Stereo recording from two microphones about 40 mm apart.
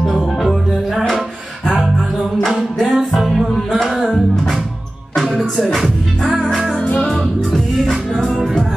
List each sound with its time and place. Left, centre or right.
0.1 s music: centre
2.4 s music: centre
6.4 s music: centre
6.8 s music: left
7.1 s music: centre